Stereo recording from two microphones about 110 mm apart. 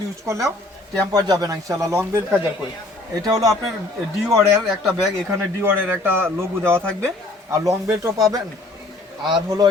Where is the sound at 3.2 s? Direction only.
30° right (ahead or behind).